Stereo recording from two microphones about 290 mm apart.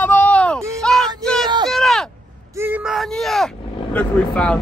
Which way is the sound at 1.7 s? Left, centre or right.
Centre.